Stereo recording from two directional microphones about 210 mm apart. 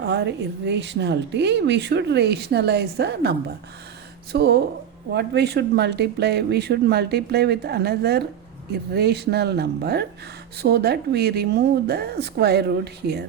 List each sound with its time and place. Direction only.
0.0 s speech: 55° right (ahead or behind)